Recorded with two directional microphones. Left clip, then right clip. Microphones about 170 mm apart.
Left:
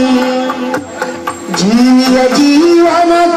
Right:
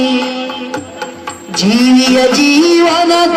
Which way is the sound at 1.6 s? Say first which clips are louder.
Even; 30° left (ahead or behind).